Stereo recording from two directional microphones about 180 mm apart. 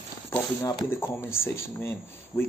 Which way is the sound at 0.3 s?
15° left (ahead or behind).